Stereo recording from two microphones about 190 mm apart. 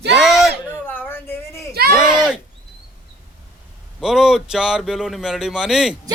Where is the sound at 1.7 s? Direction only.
55° right (ahead or behind).